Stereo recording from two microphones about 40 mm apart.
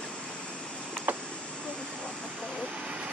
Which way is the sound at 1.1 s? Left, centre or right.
Right.